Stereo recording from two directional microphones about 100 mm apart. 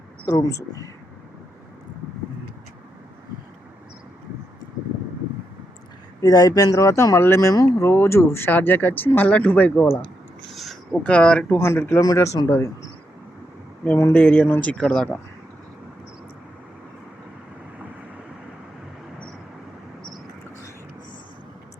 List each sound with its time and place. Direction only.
0.3 s speech: 35° left (ahead or behind)
6.2 s speech: 40° left (ahead or behind); by 9.9 s 15° left (ahead or behind)
10.5 s a sound: centre (ahead or behind)
11.0 s speech: 10° left (ahead or behind); by 12.4 s 30° left (ahead or behind)
13.8 s speech: 20° left (ahead or behind)